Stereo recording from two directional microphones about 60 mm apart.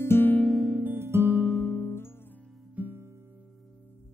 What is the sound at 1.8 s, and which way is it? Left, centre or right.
Music, left.